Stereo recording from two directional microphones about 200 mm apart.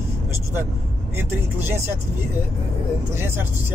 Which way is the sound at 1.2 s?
10° right (ahead or behind).